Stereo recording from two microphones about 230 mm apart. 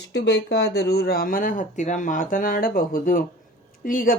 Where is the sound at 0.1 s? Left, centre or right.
Left.